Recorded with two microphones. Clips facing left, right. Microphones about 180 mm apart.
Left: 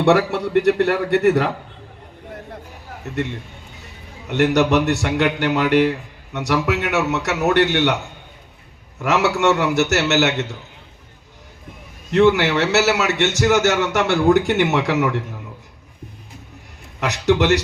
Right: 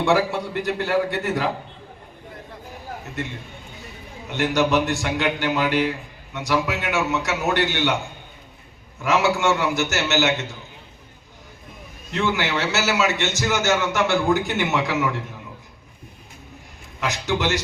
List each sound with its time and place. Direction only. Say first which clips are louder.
0.0 s a man's voice: left 4 dB; 70° left (ahead or behind)
4.3 s a man's voice: left 4 dB; 70° left (ahead or behind)
9.0 s a man's voice: left 2 dB; 70° left (ahead or behind)
12.1 s a man's voice: left 9 dB; 70° left (ahead or behind)
17.0 s a man's voice: left 6 dB; 70° left (ahead or behind)